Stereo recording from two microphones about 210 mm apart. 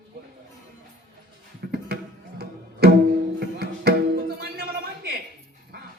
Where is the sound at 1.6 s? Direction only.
50° right (ahead or behind).